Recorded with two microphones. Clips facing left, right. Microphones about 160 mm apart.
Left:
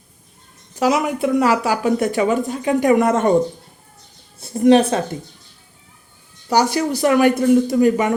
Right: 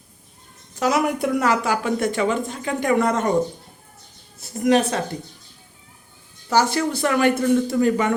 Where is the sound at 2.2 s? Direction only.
15° left (ahead or behind).